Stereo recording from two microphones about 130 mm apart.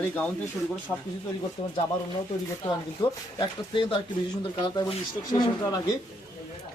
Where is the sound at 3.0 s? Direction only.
30° left (ahead or behind).